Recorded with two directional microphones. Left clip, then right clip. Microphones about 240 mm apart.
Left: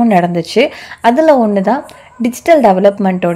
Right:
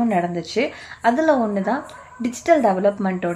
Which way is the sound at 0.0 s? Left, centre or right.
Left.